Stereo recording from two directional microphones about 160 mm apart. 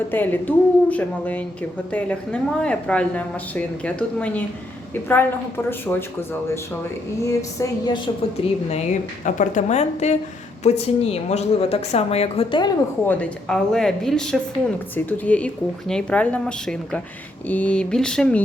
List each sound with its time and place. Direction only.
0.1 s speech: 10° left (ahead or behind)
5.8 s speech: 15° left (ahead or behind)
7.3 s a woman's voice: 25° left (ahead or behind)
8.4 s a woman's voice: 35° left (ahead or behind)
8.7 s a woman's voice: 50° left (ahead or behind); by 12.7 s 30° left (ahead or behind)
13.1 s speech: 5° left (ahead or behind)